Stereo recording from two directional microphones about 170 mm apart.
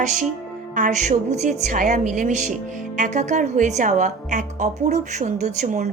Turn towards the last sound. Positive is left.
turn(degrees=-45)  # may be behind; listen again after turning